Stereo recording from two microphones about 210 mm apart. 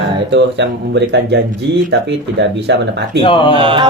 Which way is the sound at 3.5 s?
25° right (ahead or behind).